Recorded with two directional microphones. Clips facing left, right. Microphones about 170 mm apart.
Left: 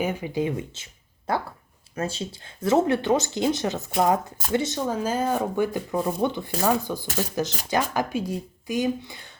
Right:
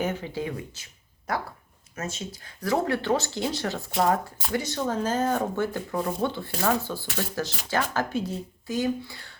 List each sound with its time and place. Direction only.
0.0 s speech: 10° left (ahead or behind)
4.9 s speech: 10° left (ahead or behind)